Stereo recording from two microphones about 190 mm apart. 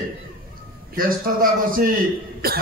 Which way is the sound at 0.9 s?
50° right (ahead or behind).